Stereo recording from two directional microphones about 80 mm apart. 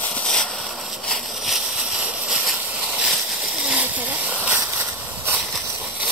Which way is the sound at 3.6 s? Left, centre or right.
Centre.